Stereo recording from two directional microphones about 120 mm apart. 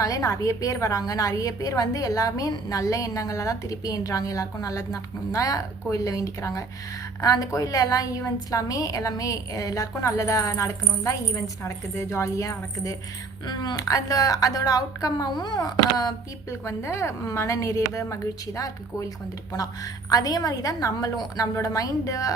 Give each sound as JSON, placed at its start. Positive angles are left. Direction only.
{"t": 0.0, "sound": "a woman's voice", "side_deg": 25}